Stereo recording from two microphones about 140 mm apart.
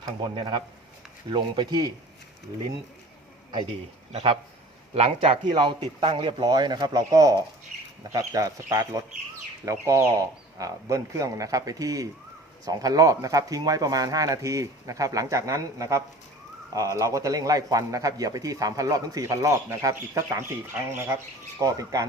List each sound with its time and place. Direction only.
0.0 s speech: 30° right (ahead or behind)
4.1 s speech: 40° right (ahead or behind); by 22.0 s 25° right (ahead or behind)